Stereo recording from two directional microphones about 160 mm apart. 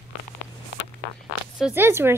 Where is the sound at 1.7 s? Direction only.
15° right (ahead or behind).